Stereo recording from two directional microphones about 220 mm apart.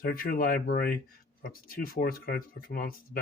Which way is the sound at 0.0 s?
40° left (ahead or behind).